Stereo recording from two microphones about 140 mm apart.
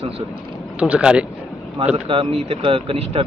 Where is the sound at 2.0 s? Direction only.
40° right (ahead or behind).